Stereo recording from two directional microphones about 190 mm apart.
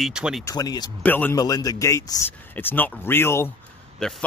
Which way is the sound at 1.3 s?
20° left (ahead or behind).